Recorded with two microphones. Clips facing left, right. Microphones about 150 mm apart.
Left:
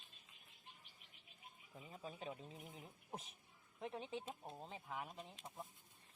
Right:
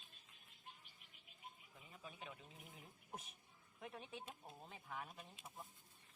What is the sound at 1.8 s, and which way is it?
Speech, 35° left (ahead or behind).